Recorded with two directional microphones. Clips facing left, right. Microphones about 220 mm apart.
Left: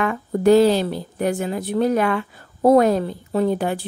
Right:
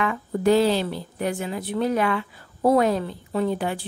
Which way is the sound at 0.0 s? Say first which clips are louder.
Left 4 dB; 45° left (ahead or behind).